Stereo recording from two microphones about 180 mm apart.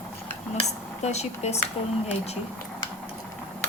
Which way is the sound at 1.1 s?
35° left (ahead or behind).